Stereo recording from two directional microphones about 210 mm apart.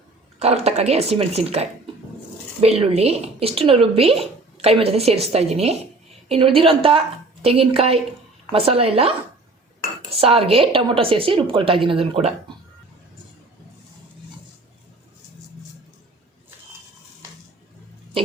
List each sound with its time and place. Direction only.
0.3 s speech: 30° right (ahead or behind)